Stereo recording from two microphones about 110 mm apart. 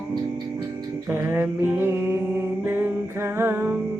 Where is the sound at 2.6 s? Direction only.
20° right (ahead or behind).